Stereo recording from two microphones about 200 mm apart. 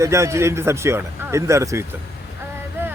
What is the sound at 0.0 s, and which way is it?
Speech, 15° right (ahead or behind).